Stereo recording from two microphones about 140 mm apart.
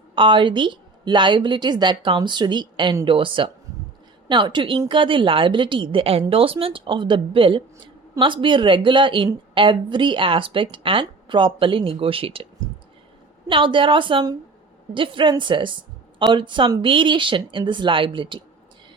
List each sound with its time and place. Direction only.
0.1 s a woman's voice: 35° right (ahead or behind)
13.5 s a woman's voice: 35° right (ahead or behind)